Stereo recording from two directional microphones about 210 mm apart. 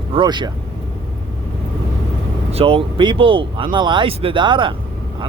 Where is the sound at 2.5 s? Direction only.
25° right (ahead or behind).